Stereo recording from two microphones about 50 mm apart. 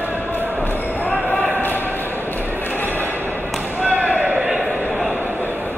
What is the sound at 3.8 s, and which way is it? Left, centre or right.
Basketball bounce, right.